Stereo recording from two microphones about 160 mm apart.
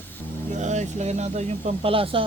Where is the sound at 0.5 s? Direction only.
45° right (ahead or behind).